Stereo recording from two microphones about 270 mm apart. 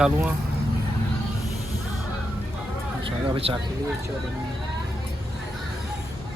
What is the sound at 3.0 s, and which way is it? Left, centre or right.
Speech, centre.